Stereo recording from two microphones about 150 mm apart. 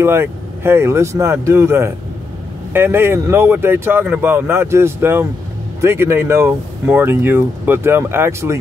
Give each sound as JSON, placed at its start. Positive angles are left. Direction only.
{"t": 0.0, "sound": "speech", "side_deg": -15}